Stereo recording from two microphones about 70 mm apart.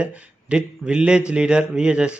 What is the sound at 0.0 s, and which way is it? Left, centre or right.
A man's voice, centre.